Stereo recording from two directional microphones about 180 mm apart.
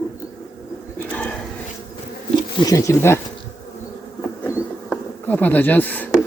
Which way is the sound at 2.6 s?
20° left (ahead or behind).